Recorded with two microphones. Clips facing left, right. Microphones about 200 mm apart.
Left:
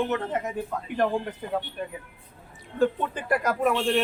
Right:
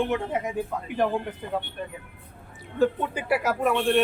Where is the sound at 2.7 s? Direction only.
5° right (ahead or behind).